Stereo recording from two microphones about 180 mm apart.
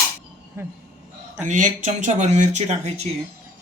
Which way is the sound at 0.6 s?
15° right (ahead or behind).